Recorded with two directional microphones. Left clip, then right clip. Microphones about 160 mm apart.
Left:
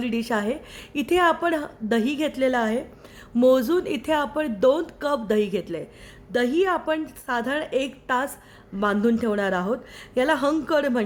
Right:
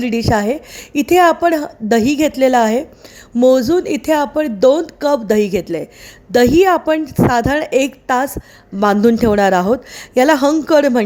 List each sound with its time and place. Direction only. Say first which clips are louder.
0.0 s a woman's voice: right 10 dB; 35° right (ahead or behind)
3.4 s a woman's voice: right 7 dB; 30° right (ahead or behind)